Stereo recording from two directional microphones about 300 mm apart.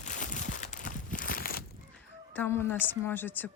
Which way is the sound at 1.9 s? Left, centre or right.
Centre.